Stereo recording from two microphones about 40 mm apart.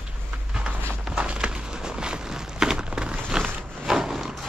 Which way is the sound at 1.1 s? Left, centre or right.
Right.